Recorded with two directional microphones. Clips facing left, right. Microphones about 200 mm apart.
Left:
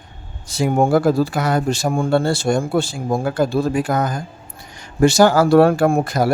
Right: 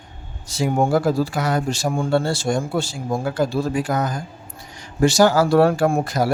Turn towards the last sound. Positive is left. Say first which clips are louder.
# left 3 dB
turn(degrees=55)  # may be behind; listen again after turning